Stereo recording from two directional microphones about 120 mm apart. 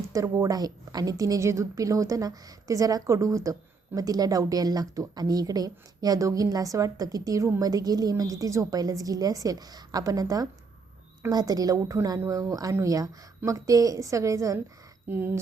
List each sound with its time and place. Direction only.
0.1 s a woman's voice: 25° right (ahead or behind)
15.0 s speech: 15° right (ahead or behind)